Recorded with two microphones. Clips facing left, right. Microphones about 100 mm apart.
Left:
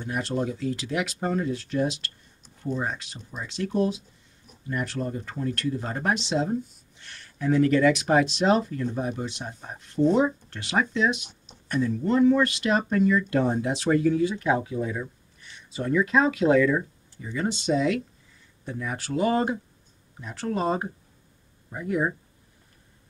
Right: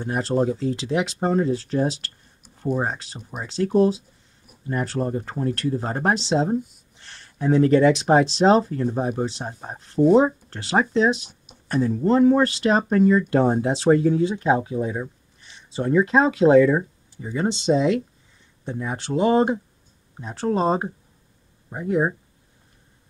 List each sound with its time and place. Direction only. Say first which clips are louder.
0.0 s speech: right 6 dB; 35° right (ahead or behind)